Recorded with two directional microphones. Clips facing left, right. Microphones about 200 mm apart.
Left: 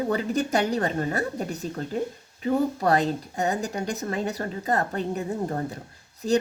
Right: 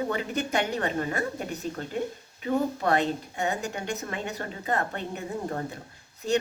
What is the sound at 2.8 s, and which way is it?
A woman's voice, 35° left (ahead or behind).